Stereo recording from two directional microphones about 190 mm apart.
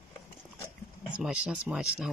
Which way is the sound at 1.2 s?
5° right (ahead or behind).